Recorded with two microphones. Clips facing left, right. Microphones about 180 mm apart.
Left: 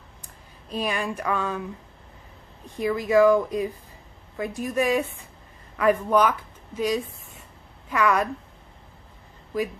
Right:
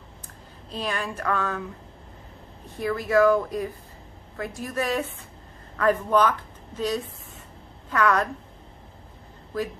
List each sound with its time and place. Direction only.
0.7 s speech: 15° left (ahead or behind)
2.8 s a woman's voice: 15° left (ahead or behind)